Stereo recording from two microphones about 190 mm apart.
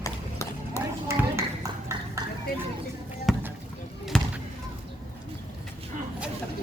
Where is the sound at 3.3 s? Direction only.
Centre (ahead or behind).